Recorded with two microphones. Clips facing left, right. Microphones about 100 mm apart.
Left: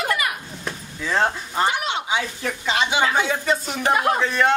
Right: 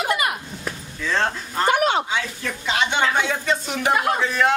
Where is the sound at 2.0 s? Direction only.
15° left (ahead or behind).